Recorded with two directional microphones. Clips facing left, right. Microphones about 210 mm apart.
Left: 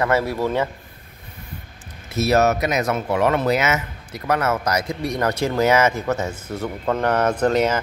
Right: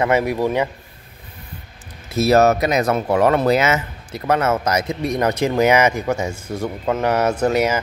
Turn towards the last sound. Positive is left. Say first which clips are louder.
# right 1 dB
turn(degrees=-10)  # may be behind; listen again after turning